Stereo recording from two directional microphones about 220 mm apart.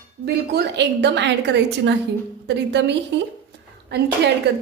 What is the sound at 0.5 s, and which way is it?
A woman's voice, 50° right (ahead or behind).